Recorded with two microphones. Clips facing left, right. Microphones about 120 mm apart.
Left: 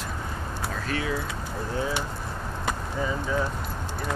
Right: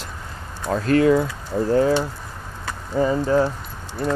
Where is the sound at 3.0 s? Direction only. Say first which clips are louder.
Right 12 dB; 60° right (ahead or behind).